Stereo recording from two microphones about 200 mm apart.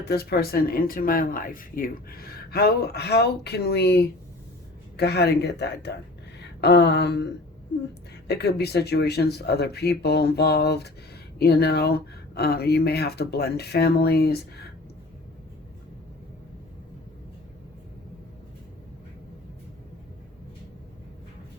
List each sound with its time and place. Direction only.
0.0 s speech: 50° left (ahead or behind)
8.3 s speech: 55° left (ahead or behind)